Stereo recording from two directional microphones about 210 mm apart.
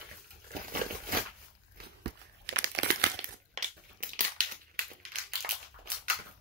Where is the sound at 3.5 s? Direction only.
40° right (ahead or behind).